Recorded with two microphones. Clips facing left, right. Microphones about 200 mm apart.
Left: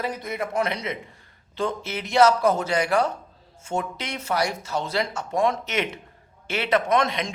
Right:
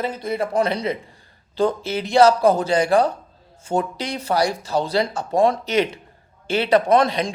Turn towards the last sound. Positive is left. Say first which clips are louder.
# right 5 dB
turn(degrees=-35)  # may be behind; listen again after turning